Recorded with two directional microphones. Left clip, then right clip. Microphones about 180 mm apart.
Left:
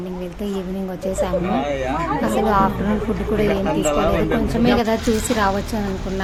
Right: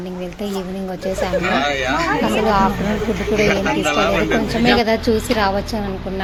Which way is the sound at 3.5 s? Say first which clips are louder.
Right 2 dB; 40° left (ahead or behind).